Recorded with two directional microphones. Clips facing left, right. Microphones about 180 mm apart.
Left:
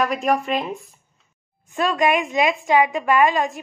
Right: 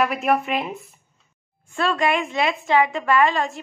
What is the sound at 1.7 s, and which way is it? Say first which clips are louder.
A woman's voice: left 2 dB; 15° left (ahead or behind).